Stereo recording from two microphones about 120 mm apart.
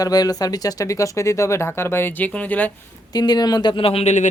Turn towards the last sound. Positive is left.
turn(degrees=75)  # may be behind; listen again after turning